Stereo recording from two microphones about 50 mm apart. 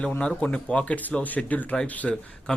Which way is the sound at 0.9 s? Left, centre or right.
Left.